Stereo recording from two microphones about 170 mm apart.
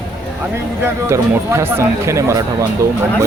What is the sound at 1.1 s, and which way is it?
Speech, 15° right (ahead or behind).